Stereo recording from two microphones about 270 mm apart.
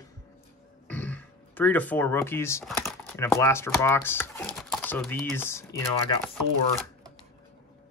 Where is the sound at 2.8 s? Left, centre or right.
Centre.